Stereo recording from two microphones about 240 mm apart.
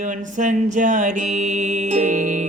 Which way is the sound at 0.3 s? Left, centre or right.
Right.